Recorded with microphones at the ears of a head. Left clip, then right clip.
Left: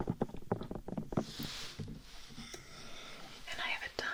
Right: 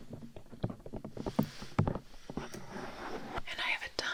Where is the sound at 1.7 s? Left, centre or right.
Right.